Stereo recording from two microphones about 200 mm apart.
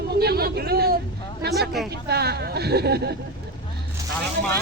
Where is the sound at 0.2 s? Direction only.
50° right (ahead or behind).